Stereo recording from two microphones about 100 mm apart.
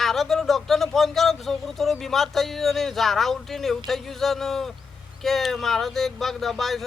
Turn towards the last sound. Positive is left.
turn(degrees=0)  # may be behind; listen again after turning